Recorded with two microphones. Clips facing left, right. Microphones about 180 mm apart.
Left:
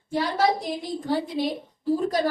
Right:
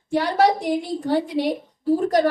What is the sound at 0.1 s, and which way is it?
A woman's voice, 70° right (ahead or behind).